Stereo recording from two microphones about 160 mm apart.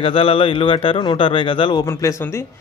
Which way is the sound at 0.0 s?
35° left (ahead or behind).